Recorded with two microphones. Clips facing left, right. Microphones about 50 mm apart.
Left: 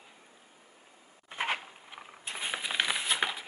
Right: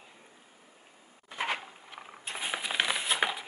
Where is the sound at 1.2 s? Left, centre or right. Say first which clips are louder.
Even; left.